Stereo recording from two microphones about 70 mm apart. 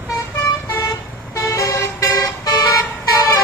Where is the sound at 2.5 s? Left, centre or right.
Left.